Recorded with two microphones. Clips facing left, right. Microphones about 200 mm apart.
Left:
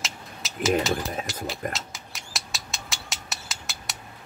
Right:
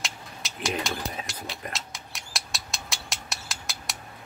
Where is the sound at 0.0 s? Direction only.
Centre (ahead or behind).